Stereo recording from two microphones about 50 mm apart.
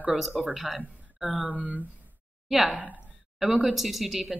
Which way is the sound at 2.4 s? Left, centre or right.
Centre.